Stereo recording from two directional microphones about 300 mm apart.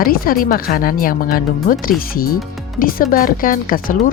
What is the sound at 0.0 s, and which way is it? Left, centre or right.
Speech, left.